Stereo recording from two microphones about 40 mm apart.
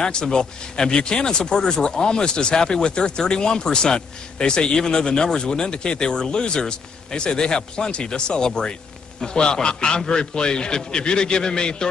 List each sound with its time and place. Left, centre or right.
0.0 s speech: centre